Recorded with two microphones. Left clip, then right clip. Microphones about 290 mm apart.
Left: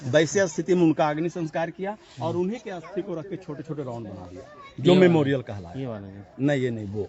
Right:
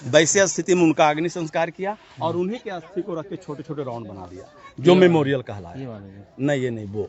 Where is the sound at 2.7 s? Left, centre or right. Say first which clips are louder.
Right 3 dB; right.